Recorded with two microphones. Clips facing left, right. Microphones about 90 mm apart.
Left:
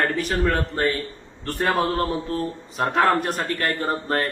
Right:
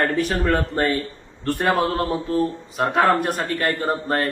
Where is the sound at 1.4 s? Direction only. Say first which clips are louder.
Right 2 dB; 15° right (ahead or behind).